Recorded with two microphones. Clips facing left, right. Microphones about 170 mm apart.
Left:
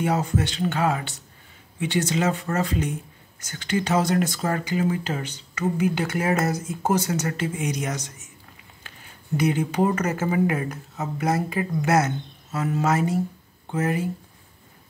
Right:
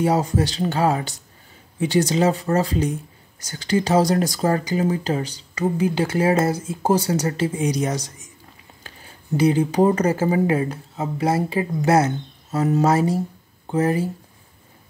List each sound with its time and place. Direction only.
0.0 s speech: 35° right (ahead or behind)